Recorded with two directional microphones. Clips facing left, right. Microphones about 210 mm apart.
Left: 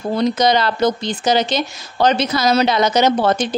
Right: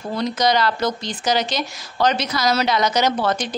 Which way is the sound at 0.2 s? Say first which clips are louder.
Left 3 dB; 25° left (ahead or behind).